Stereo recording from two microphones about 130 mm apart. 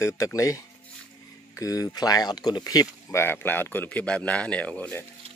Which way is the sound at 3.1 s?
20° left (ahead or behind).